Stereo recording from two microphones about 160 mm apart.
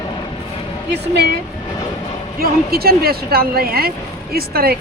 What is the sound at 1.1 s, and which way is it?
Speech, 90° right.